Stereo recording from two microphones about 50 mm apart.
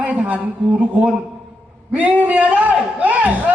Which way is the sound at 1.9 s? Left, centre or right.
Right.